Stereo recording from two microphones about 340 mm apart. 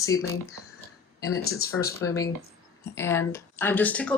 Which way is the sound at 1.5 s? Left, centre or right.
Left.